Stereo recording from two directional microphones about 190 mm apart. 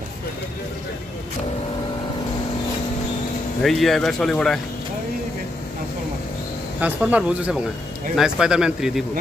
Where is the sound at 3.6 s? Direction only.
Centre (ahead or behind).